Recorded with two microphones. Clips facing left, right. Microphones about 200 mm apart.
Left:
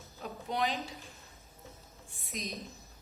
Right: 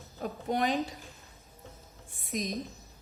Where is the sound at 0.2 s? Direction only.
50° right (ahead or behind).